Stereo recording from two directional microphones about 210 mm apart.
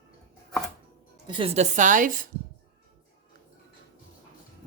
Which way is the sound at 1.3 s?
25° right (ahead or behind).